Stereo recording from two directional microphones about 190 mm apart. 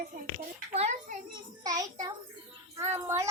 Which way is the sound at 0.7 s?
35° right (ahead or behind).